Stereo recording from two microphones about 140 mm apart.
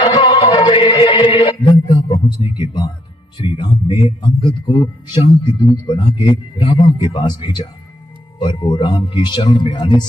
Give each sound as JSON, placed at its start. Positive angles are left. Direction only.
{"t": 0.0, "sound": "a man's voice", "side_deg": 35}